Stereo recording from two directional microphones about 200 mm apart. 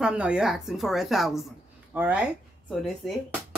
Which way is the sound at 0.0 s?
5° right (ahead or behind).